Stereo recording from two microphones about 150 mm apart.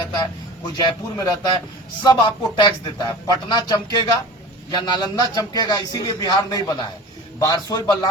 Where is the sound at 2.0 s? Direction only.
25° left (ahead or behind).